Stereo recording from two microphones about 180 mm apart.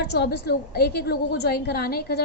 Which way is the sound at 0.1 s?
65° left (ahead or behind).